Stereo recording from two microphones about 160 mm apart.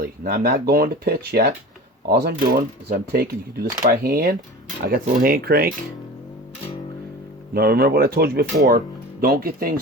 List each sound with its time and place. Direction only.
0.0 s speech: 65° right (ahead or behind)
4.0 s speech: 60° right (ahead or behind)
7.5 s speech: 75° right (ahead or behind)
9.2 s speech: 65° right (ahead or behind)